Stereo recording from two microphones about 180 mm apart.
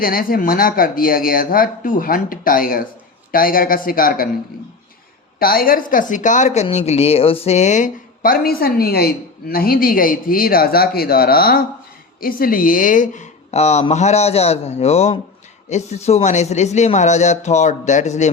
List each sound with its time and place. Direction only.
0.0 s a woman's voice: 55° left (ahead or behind)
5.4 s a woman's voice: 55° left (ahead or behind)